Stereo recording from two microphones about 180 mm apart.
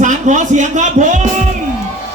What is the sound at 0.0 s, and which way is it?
Speech, 45° right (ahead or behind).